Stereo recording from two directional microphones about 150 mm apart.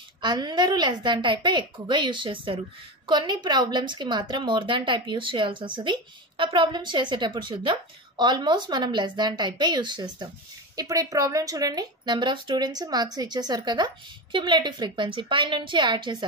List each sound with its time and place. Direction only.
0.2 s a woman's voice: 30° right (ahead or behind)